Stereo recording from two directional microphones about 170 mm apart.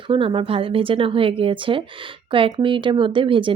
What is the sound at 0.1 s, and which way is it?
Speech, 30° right (ahead or behind).